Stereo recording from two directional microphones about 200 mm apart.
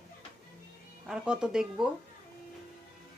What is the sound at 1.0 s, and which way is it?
Speech, 5° right (ahead or behind).